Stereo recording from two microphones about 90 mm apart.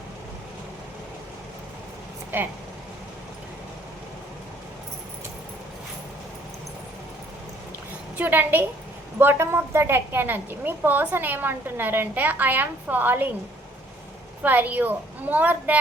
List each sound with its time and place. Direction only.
2.3 s a woman's voice: 25° right (ahead or behind)
8.2 s a woman's voice: 20° right (ahead or behind)
14.4 s a woman's voice: 20° right (ahead or behind)